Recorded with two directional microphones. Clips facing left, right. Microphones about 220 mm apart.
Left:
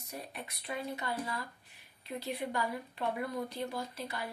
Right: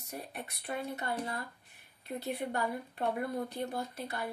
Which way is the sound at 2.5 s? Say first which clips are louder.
Right 1 dB; 45° right (ahead or behind).